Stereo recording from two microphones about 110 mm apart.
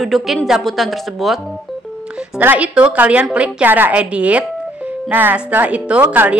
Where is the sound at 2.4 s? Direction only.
15° right (ahead or behind).